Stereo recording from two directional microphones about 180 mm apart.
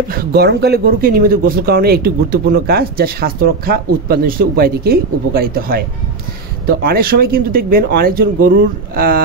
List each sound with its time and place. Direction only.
0.1 s speech: 60° right (ahead or behind)